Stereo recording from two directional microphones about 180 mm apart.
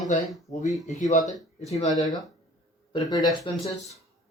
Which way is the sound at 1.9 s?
20° left (ahead or behind).